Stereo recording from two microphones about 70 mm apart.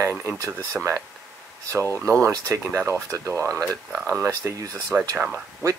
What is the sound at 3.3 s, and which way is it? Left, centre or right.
Speech, right.